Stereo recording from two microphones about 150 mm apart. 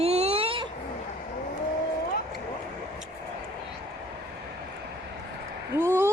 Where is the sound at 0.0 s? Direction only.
45° right (ahead or behind).